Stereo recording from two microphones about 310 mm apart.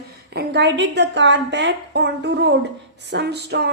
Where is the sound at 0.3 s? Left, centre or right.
Right.